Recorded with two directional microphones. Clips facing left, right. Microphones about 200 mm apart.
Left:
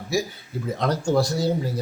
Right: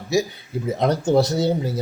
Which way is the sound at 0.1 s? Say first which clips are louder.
Right 4 dB; 20° right (ahead or behind).